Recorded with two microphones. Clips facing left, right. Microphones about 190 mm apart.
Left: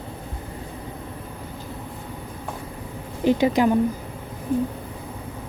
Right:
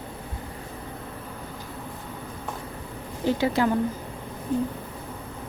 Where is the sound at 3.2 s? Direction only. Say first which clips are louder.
Left 4 dB; 15° left (ahead or behind).